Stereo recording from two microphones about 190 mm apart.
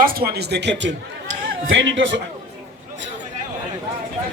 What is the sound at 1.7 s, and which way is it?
Speech, 75° right (ahead or behind).